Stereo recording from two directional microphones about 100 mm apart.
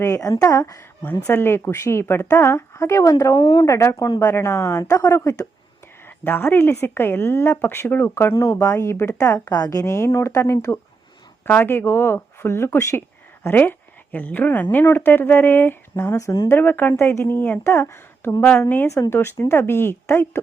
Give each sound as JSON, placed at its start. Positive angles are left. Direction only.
{"t": 0.0, "sound": "speech", "side_deg": 35}
{"t": 1.2, "sound": "a woman's voice", "side_deg": 25}
{"t": 3.4, "sound": "speech", "side_deg": 55}
{"t": 3.7, "sound": "a woman's voice", "side_deg": 30}
{"t": 6.1, "sound": "a woman's voice", "side_deg": 20}
{"t": 11.4, "sound": "a woman's voice", "side_deg": 20}